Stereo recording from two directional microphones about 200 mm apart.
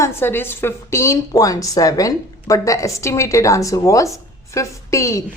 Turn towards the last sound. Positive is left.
turn(degrees=15)  # may be behind; listen again after turning